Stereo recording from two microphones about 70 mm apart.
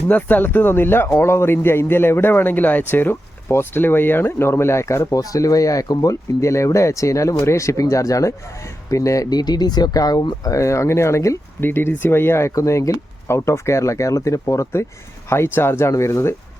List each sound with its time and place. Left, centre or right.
0.1 s a man's voice: left
9.3 s speech: left
11.6 s a man's voice: left